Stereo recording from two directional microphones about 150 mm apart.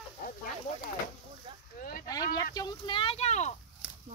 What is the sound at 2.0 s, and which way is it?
Speech, 25° left (ahead or behind).